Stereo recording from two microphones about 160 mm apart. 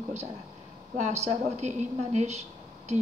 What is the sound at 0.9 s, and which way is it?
A woman's voice, 45° right (ahead or behind).